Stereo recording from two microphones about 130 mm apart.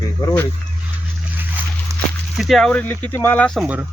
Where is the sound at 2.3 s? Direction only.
Centre (ahead or behind).